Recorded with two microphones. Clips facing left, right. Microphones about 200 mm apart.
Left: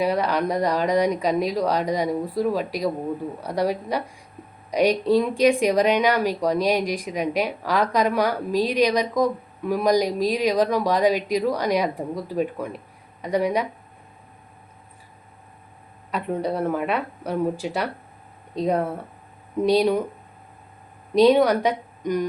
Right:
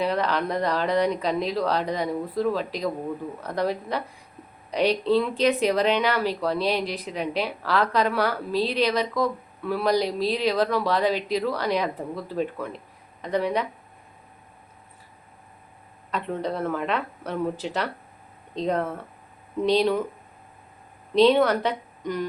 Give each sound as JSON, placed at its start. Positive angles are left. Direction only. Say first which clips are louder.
{"t": 0.0, "sound": "speech", "louder": "left 3 dB", "side_deg": 10}
{"t": 16.1, "sound": "speech", "louder": "left 3 dB", "side_deg": 10}
{"t": 21.1, "sound": "a woman's voice", "louder": "left 2 dB", "side_deg": 10}